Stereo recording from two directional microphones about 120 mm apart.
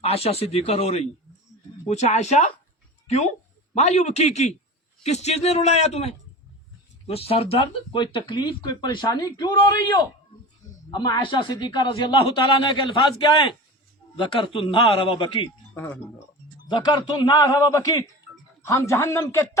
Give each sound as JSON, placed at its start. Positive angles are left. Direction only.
{"t": 0.0, "sound": "a man's voice", "side_deg": 55}
{"t": 15.7, "sound": "speech", "side_deg": 20}
{"t": 16.6, "sound": "speech", "side_deg": 35}